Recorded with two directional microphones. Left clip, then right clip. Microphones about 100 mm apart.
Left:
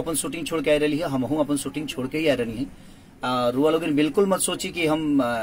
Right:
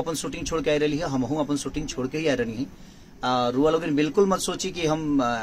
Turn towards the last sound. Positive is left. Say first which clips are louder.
# left 1 dB
turn(degrees=-30)  # may be behind; listen again after turning